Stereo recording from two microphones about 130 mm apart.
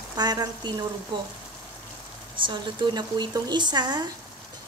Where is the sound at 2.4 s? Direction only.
35° right (ahead or behind).